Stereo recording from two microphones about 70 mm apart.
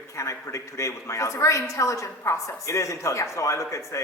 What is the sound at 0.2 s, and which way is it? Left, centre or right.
A woman's voice, left.